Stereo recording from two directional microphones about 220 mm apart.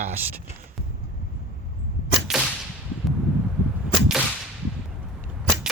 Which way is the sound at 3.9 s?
5° right (ahead or behind).